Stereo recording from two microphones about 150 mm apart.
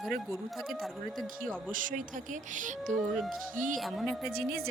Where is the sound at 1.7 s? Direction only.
60° right (ahead or behind).